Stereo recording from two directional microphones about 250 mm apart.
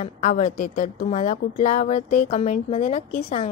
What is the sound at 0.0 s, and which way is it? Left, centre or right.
A woman's voice, left.